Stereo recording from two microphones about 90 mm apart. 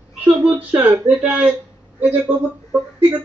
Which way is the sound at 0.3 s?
5° right (ahead or behind).